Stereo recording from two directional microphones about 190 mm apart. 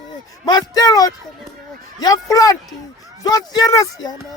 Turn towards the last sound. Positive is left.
turn(degrees=20)  # may be behind; listen again after turning